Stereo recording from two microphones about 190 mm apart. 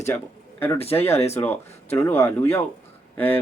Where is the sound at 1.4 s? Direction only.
10° left (ahead or behind).